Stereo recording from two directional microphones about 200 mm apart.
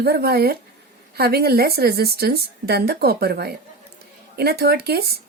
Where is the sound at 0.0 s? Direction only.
50° right (ahead or behind).